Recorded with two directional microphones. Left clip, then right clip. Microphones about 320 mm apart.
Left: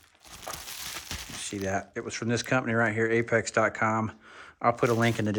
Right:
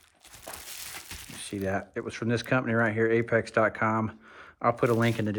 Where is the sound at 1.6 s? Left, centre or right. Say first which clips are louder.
Right 1 dB; centre.